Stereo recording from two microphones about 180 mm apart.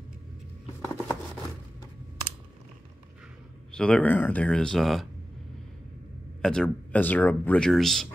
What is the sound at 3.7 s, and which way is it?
Speech, 5° left (ahead or behind).